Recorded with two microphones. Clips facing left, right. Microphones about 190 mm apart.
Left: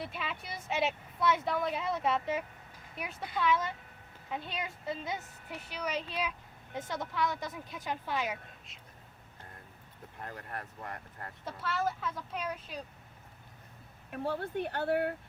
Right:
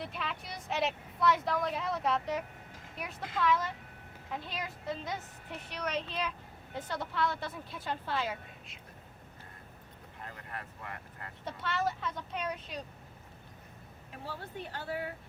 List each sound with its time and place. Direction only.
0.0 s a woman's voice: 5° left (ahead or behind)
3.4 s a woman's voice: centre (ahead or behind)
6.8 s a woman's voice: 20° left (ahead or behind)
10.2 s speech: 50° left (ahead or behind)
11.4 s a woman's voice: 5° left (ahead or behind)
14.1 s speech: 60° left (ahead or behind)